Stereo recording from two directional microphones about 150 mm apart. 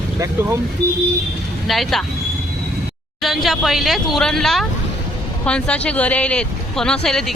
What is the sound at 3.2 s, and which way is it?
Speech, centre (ahead or behind).